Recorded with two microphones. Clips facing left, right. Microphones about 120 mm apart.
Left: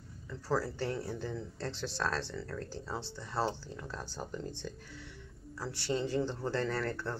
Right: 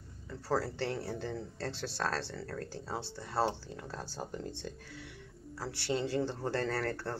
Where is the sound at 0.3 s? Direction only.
60° right (ahead or behind).